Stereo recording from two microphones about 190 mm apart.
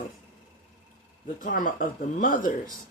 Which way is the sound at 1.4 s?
45° left (ahead or behind).